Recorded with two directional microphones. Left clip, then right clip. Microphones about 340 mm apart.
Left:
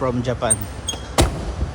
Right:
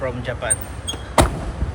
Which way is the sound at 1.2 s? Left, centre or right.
Centre.